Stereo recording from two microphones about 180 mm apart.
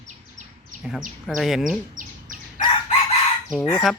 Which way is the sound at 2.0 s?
45° right (ahead or behind).